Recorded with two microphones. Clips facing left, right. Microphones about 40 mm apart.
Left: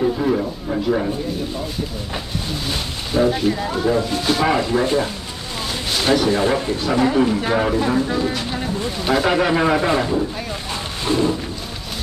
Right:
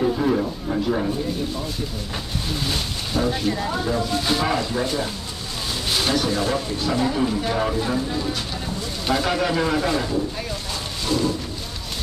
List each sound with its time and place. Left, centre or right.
0.0 s a sound: centre
2.5 s speech: centre
9.0 s speech: centre
11.1 s music: left